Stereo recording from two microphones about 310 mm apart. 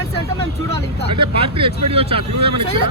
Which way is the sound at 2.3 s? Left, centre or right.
Right.